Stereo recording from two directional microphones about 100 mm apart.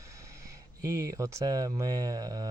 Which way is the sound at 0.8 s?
30° right (ahead or behind).